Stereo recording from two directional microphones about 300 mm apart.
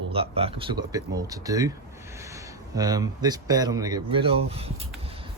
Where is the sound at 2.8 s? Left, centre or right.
Centre.